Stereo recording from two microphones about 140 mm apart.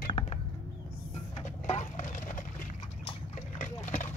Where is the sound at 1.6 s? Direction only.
60° left (ahead or behind).